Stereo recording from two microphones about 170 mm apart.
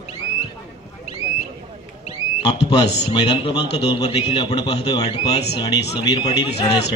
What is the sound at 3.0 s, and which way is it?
A man's voice, 30° left (ahead or behind).